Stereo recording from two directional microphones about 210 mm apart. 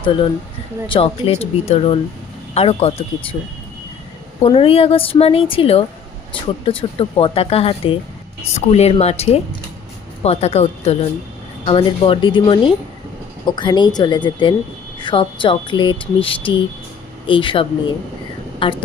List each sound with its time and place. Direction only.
0.0 s speech: 25° left (ahead or behind)
4.4 s speech: 25° left (ahead or behind)